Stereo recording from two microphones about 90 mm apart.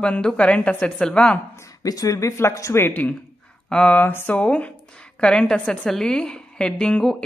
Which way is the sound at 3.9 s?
20° left (ahead or behind).